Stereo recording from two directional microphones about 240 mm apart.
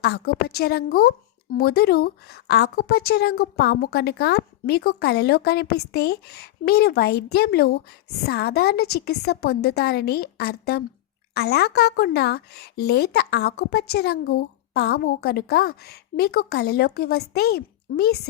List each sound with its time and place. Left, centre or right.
0.0 s a woman's voice: left